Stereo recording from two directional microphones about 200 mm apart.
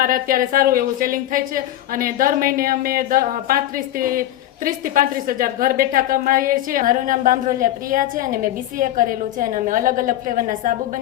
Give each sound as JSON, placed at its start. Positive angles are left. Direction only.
{"t": 0.0, "sound": "a woman's voice", "side_deg": -45}